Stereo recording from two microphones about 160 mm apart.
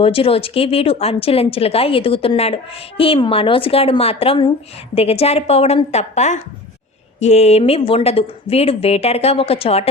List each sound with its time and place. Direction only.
0.0 s a woman's voice: 35° left (ahead or behind)